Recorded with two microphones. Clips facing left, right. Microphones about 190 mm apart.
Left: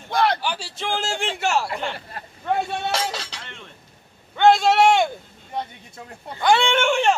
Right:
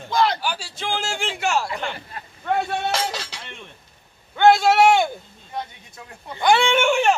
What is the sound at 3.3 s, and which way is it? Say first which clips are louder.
Cutlery: right 1 dB; 15° right (ahead or behind).